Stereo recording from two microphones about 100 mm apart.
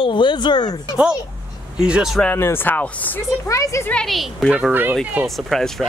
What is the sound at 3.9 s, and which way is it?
Speech, 5° left (ahead or behind).